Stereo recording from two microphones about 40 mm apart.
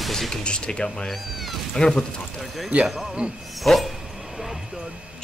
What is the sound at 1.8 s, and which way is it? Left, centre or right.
Speech, centre.